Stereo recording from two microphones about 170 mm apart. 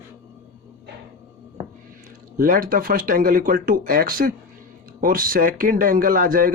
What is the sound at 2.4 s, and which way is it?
A man's voice, 55° right (ahead or behind).